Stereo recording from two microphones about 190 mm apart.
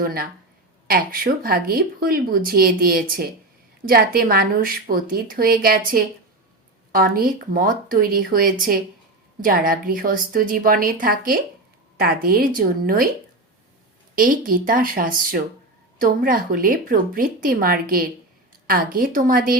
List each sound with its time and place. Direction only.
0.0 s speech: 50° right (ahead or behind)
14.2 s speech: 50° right (ahead or behind)